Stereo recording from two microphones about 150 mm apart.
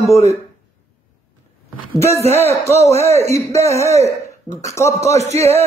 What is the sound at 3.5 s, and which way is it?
A man's voice, 20° left (ahead or behind).